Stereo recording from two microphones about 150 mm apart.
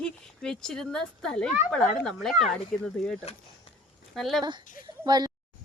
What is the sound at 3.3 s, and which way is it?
Speech, 40° left (ahead or behind).